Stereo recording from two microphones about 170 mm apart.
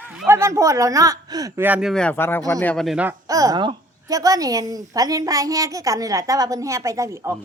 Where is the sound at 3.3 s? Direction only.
20° right (ahead or behind).